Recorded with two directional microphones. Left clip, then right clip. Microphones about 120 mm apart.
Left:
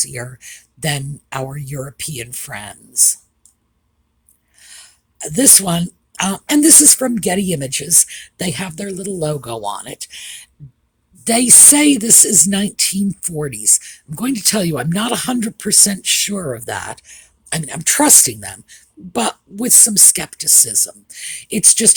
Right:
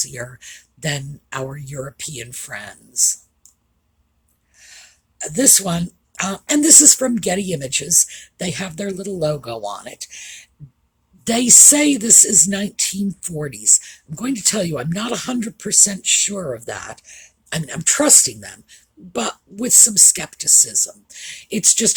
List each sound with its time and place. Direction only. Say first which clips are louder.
0.0 s speech: left 2 dB; 40° left (ahead or behind)
4.5 s speech: left 2 dB; 45° left (ahead or behind)
11.2 s speech: left 1 dB; 40° left (ahead or behind)